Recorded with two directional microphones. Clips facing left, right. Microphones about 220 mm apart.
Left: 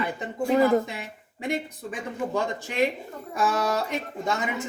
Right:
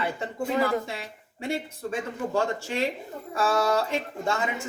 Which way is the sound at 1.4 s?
15° left (ahead or behind).